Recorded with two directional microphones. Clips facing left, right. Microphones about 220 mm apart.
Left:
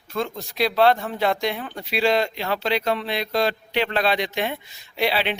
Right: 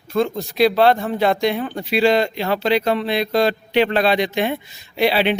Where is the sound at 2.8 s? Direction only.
50° right (ahead or behind).